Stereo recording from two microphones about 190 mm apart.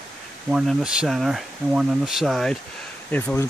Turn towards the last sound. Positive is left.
turn(degrees=10)  # may be behind; listen again after turning